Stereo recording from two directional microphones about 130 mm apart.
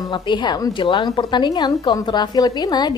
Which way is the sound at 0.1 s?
35° left (ahead or behind).